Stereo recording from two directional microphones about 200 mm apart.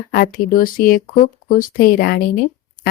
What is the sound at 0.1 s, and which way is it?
A woman's voice, 45° left (ahead or behind).